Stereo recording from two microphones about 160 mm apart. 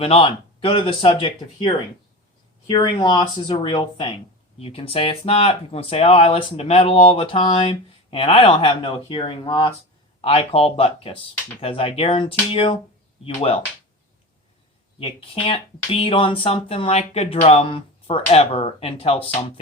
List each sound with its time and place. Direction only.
0.0 s speech: 35° left (ahead or behind)
14.9 s speech: 35° left (ahead or behind)